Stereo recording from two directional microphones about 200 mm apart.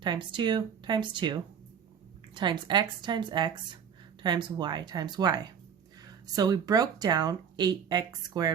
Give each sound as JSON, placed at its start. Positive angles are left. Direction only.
{"t": 0.0, "sound": "speech", "side_deg": -25}